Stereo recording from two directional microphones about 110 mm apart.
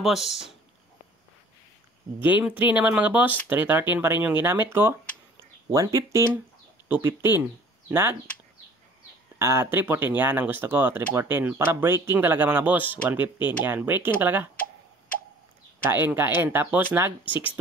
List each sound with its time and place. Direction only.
0.0 s speech: 5° right (ahead or behind)
2.1 s speech: 15° right (ahead or behind)
5.4 s a sound: 30° right (ahead or behind)
6.9 s speech: 20° right (ahead or behind)
9.4 s speech: 25° right (ahead or behind)
15.8 s speech: 20° right (ahead or behind)